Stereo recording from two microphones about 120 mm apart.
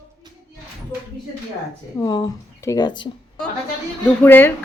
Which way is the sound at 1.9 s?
30° left (ahead or behind).